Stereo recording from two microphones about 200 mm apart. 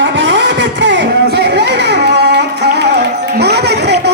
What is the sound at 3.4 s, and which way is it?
Music, 55° right (ahead or behind).